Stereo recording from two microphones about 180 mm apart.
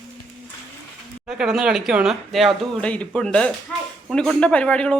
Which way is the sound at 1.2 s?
5° right (ahead or behind).